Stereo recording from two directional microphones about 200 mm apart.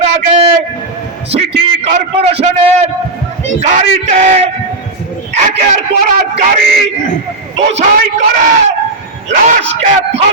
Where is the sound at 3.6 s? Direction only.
35° right (ahead or behind).